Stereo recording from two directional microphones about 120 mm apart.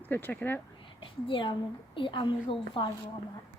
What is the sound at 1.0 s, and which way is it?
A woman's voice, 45° left (ahead or behind).